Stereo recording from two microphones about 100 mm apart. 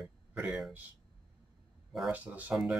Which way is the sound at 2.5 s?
Centre (ahead or behind).